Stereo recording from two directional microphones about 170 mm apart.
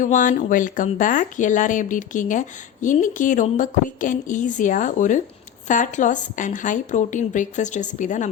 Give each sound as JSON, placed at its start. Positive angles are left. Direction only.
{"t": 0.0, "sound": "speech", "side_deg": 50}